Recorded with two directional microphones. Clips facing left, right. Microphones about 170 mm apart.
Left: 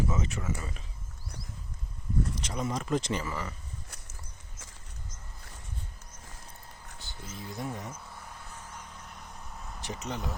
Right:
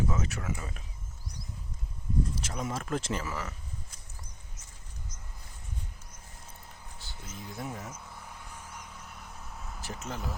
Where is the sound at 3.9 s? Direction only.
70° left (ahead or behind).